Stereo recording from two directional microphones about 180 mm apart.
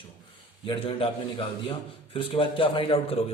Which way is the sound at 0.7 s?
30° left (ahead or behind).